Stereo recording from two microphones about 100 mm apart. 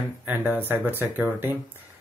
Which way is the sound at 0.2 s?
15° right (ahead or behind).